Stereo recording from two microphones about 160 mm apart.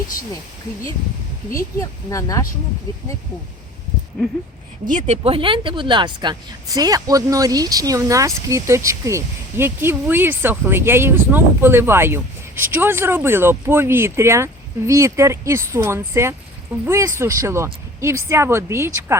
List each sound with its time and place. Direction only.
1.5 s speech: 20° left (ahead or behind)
4.9 s speech: 50° right (ahead or behind); by 18.9 s 15° right (ahead or behind)